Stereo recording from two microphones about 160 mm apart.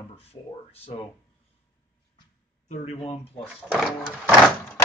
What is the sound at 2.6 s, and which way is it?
Speech, 45° left (ahead or behind).